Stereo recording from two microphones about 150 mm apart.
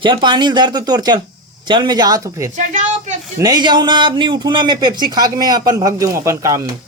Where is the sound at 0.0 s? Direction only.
30° right (ahead or behind).